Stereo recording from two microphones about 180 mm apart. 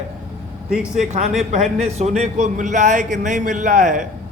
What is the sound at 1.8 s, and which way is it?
A man's voice, 40° right (ahead or behind).